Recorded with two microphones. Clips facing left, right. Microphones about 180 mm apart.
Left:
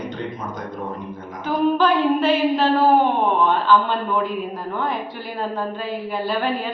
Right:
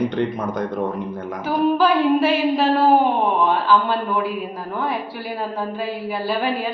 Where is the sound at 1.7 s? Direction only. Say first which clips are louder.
Right 3 dB; 10° right (ahead or behind).